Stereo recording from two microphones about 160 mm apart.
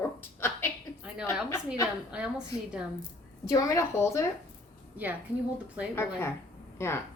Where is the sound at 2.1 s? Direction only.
5° right (ahead or behind).